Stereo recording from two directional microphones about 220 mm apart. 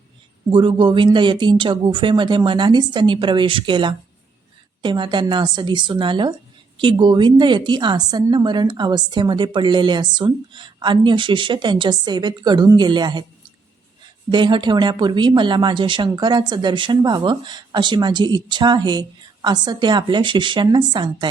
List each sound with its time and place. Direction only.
0.5 s speech: 20° right (ahead or behind)
14.3 s speech: 20° right (ahead or behind)